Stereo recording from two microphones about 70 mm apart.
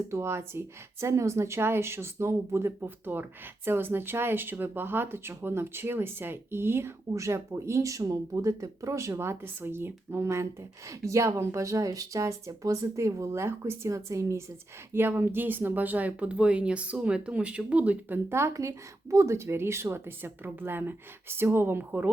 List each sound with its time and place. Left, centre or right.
0.1 s speech: right
7.1 s speech: right
14.9 s speech: right
18.3 s speech: right